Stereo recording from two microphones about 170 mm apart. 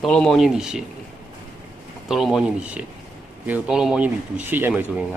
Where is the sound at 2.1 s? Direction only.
Centre (ahead or behind).